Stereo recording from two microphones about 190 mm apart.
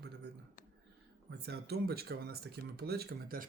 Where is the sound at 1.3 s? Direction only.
60° right (ahead or behind).